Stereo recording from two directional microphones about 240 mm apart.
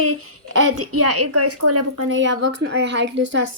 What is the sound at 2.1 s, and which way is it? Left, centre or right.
A woman's voice, right.